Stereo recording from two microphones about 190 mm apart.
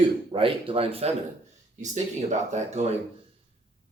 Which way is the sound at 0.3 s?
30° right (ahead or behind).